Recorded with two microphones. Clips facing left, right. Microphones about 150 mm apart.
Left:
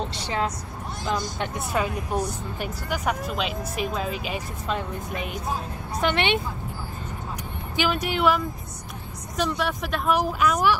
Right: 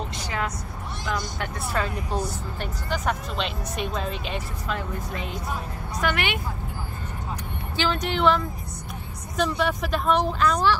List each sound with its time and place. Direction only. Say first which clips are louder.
0.1 s speech: left 3 dB; 30° left (ahead or behind)
1.0 s speech: left 2 dB; 20° left (ahead or behind)
4.6 s speech: left 3 dB; 20° left (ahead or behind)
7.7 s speech: left 1 dB; 10° left (ahead or behind)
9.4 s speech: right 2 dB; centre (ahead or behind)